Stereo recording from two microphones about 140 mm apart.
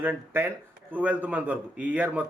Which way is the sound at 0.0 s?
15° right (ahead or behind).